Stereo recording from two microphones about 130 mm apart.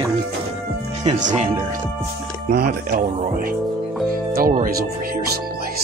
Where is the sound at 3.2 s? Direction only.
90° right.